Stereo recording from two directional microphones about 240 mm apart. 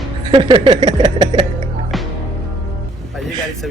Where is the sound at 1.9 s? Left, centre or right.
Centre.